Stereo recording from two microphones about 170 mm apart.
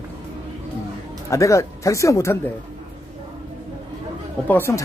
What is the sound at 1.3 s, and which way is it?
Speech, 20° left (ahead or behind).